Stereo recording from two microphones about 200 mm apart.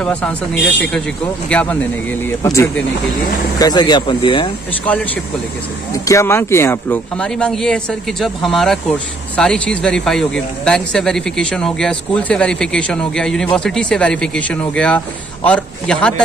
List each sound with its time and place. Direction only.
0.0 s a man's voice: 5° left (ahead or behind); by 4.5 s 25° left (ahead or behind)
6.0 s a man's voice: 15° left (ahead or behind)